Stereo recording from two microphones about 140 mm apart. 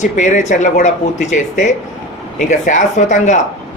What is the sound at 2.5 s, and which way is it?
Speech, 60° left (ahead or behind).